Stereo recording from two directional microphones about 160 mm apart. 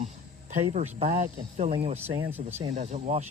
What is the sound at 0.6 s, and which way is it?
Speech, 40° right (ahead or behind).